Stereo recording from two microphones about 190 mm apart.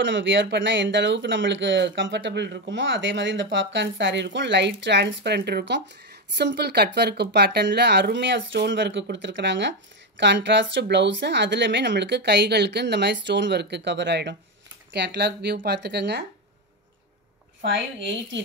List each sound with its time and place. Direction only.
0.0 s speech: 70° right (ahead or behind)
17.6 s speech: 70° right (ahead or behind)